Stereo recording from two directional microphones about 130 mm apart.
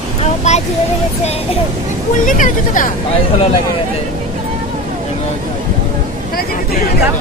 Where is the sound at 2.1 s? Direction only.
85° left.